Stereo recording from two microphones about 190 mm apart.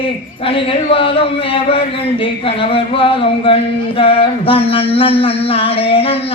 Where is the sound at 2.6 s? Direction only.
30° left (ahead or behind).